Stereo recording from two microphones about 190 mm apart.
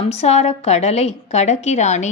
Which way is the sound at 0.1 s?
35° left (ahead or behind).